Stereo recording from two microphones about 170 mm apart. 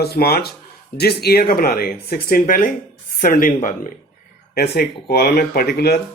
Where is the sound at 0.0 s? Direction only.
65° left (ahead or behind); by 3.9 s 50° left (ahead or behind).